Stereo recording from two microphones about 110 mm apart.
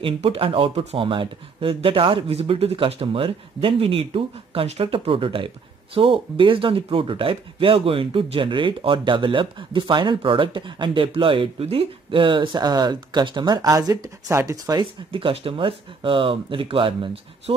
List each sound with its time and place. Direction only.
0.0 s speech: 55° right (ahead or behind); by 14.6 s 30° right (ahead or behind)
15.0 s speech: 55° right (ahead or behind)